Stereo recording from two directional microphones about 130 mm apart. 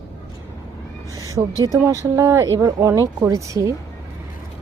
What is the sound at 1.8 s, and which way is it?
Speech, 20° right (ahead or behind).